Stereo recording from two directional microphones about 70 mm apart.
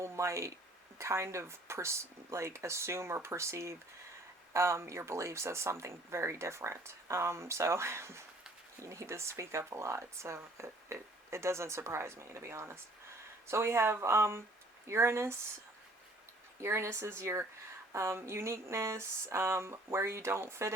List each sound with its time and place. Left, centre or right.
0.0 s speech: right
16.6 s speech: right